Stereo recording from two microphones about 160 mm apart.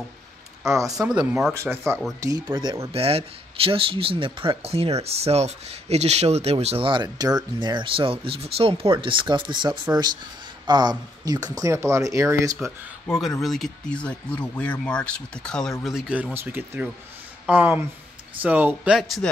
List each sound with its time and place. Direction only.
0.7 s speech: 20° right (ahead or behind)
0.9 s speech: 5° right (ahead or behind); by 2.9 s 25° right (ahead or behind)
2.9 s speech: 40° right (ahead or behind); by 12.5 s 20° right (ahead or behind)
13.1 s speech: centre (ahead or behind)